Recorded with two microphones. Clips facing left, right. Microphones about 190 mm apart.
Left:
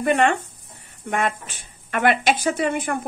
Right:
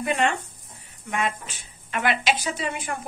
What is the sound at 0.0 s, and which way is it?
Speech, 55° left (ahead or behind).